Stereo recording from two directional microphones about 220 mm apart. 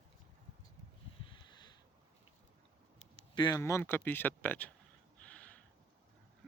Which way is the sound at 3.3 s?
20° left (ahead or behind).